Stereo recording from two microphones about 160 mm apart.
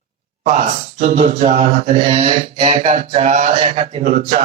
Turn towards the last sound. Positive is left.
turn(degrees=-45)  # may be behind; listen again after turning